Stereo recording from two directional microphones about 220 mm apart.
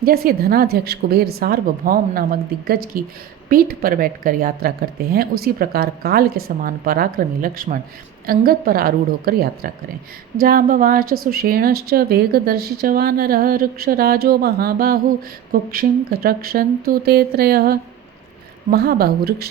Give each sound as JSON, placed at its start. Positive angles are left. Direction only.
{"t": 0.0, "sound": "a woman's voice", "side_deg": -45}